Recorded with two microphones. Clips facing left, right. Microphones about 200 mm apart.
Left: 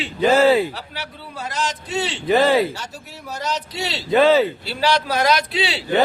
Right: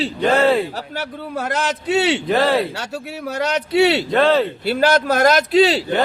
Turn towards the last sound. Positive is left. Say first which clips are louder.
# right 7 dB
turn(degrees=-45)  # may be behind; listen again after turning